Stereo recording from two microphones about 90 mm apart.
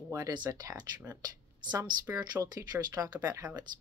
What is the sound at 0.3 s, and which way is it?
Speech, 45° right (ahead or behind).